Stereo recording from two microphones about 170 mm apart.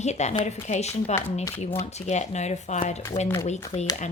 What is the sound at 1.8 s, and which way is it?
Speech, 40° left (ahead or behind).